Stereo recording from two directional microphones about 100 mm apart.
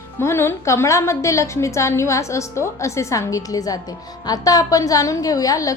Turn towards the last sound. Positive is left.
turn(degrees=35)  # may be behind; listen again after turning